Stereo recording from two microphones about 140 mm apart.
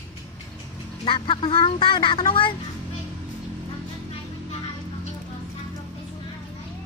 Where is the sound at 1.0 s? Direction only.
40° left (ahead or behind).